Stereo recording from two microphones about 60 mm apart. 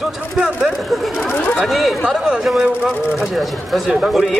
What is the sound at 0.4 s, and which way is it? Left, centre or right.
Speech, centre.